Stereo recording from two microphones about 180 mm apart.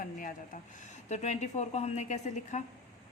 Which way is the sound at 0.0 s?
50° left (ahead or behind).